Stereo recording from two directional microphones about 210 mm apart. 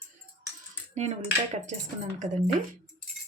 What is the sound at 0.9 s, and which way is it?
Cutlery, 30° right (ahead or behind).